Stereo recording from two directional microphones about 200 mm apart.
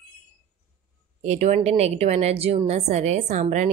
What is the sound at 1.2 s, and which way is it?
Speech, 35° right (ahead or behind).